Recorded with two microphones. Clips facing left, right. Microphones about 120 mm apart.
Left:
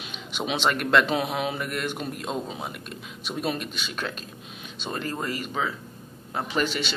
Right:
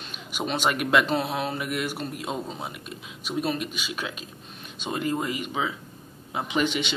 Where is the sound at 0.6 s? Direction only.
10° right (ahead or behind).